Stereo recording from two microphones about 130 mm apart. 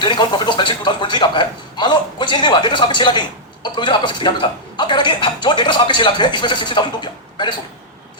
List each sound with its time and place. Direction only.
0.0 s a man's voice: 35° left (ahead or behind)